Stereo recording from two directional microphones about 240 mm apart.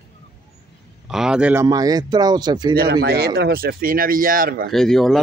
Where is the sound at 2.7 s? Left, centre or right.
Right.